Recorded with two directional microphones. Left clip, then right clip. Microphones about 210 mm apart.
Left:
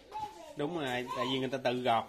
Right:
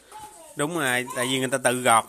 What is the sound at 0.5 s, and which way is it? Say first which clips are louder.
Speech: right 11 dB; 45° right (ahead or behind).